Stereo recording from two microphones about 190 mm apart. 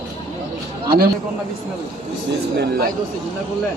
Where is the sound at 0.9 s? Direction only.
55° right (ahead or behind).